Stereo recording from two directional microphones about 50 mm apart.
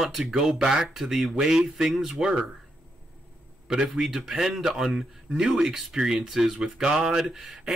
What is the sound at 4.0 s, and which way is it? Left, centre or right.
Speech, centre.